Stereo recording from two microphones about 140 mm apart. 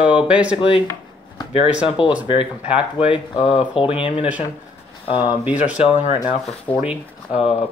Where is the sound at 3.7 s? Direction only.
40° left (ahead or behind).